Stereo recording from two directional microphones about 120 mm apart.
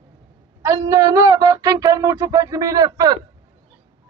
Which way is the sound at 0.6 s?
25° right (ahead or behind).